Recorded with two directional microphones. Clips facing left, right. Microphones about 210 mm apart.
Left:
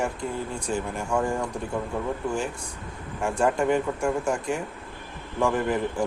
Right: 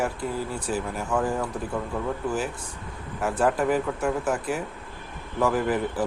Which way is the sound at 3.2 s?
5° right (ahead or behind).